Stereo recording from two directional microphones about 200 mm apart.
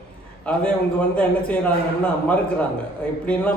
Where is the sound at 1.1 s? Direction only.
5° left (ahead or behind).